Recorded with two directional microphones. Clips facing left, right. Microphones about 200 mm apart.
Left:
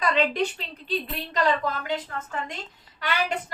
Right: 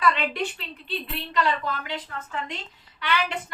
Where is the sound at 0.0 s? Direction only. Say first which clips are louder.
Left 2 dB; 40° left (ahead or behind).